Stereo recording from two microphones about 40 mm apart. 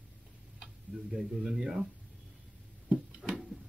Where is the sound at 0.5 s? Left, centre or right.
Centre.